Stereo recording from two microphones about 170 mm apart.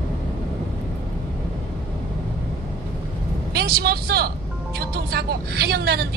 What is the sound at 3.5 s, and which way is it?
Speech, 65° right (ahead or behind).